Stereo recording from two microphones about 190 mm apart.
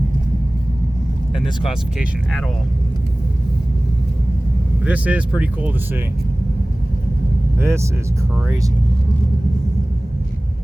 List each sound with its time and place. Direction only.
4.8 s speech: 5° right (ahead or behind)
7.6 s speech: 15° right (ahead or behind)